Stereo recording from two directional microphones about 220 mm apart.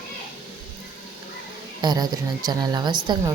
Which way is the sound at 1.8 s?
20° right (ahead or behind).